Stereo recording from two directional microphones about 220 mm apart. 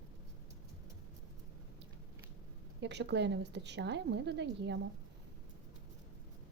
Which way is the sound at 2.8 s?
50° right (ahead or behind).